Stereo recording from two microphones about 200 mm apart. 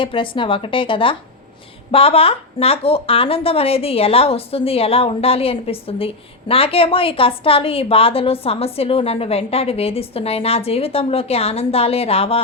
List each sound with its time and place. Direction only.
0.0 s a woman's voice: 25° left (ahead or behind)